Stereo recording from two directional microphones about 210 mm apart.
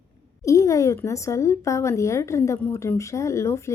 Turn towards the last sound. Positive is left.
turn(degrees=15)  # may be behind; listen again after turning